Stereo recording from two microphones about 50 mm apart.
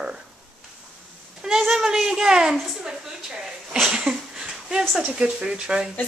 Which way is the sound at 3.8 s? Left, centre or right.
Centre.